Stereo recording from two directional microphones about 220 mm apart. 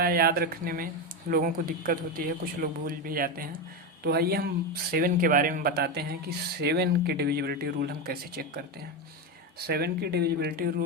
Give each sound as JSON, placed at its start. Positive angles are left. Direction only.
{"t": 0.0, "sound": "speech", "side_deg": -45}